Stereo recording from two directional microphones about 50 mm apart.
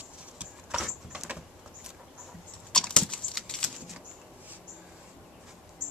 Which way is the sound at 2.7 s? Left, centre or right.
Centre.